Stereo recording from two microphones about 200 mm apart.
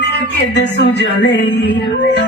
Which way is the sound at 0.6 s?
60° left (ahead or behind).